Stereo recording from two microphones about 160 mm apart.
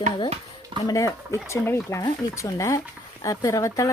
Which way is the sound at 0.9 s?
20° left (ahead or behind).